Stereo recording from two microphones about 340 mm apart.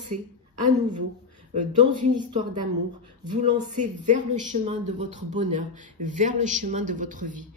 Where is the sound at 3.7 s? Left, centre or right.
Right.